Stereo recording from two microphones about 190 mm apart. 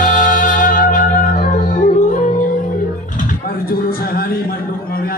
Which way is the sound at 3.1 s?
45° left (ahead or behind).